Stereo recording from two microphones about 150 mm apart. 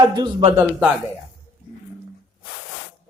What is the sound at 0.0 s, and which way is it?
Speech, 30° right (ahead or behind).